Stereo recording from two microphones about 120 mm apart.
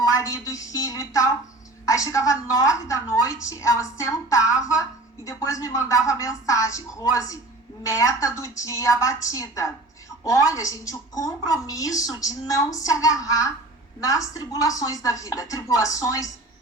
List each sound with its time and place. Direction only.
0.2 s a woman's voice: 30° left (ahead or behind)